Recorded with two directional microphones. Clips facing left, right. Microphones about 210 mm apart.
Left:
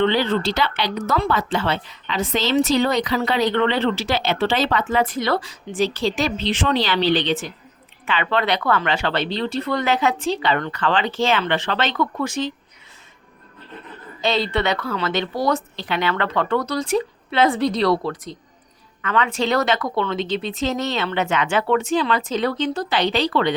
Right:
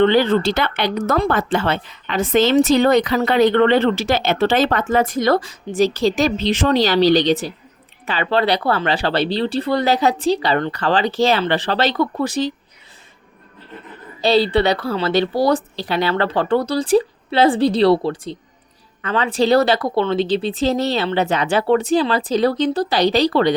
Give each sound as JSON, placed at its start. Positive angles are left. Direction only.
{"t": 0.0, "sound": "speech", "side_deg": -50}
{"t": 14.2, "sound": "speech", "side_deg": -35}